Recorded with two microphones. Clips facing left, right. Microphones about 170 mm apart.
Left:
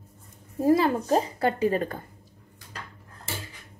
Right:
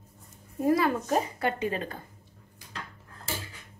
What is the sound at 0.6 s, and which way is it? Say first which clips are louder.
A woman's voice: left 3 dB; 30° left (ahead or behind).